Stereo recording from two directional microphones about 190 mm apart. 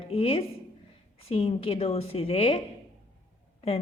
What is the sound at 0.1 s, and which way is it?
A woman's voice, 30° left (ahead or behind).